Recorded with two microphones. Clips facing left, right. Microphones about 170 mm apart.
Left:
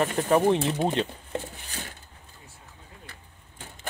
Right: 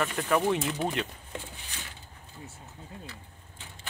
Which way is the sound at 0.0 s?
35° left (ahead or behind).